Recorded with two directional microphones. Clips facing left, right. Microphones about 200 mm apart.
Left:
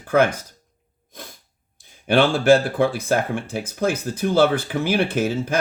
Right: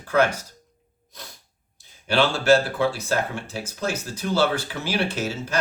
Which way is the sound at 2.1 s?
55° left (ahead or behind).